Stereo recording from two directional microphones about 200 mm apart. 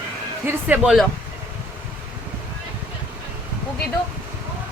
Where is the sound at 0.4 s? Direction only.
5° right (ahead or behind).